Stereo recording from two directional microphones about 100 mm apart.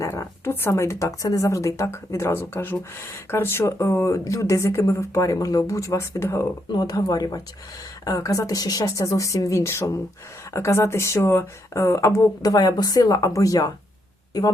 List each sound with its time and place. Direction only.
0.0 s speech: 30° left (ahead or behind)
6.7 s speech: 40° left (ahead or behind)